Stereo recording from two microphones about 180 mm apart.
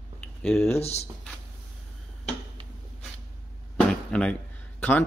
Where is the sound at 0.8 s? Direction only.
35° left (ahead or behind).